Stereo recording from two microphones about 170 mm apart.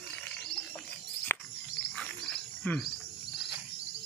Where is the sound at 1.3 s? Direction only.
15° left (ahead or behind).